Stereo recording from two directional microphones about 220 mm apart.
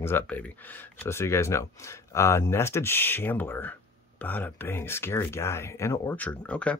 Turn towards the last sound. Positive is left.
turn(degrees=5)  # may be behind; listen again after turning